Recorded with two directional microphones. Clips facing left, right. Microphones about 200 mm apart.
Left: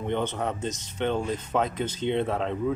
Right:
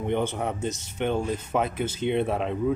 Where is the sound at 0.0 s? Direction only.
10° right (ahead or behind).